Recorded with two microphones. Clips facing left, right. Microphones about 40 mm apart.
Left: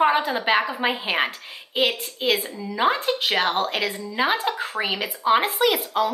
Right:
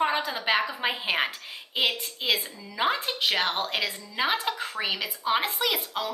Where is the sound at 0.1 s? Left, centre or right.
Left.